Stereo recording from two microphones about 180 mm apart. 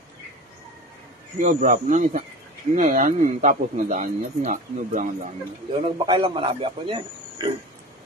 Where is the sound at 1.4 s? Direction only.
45° right (ahead or behind).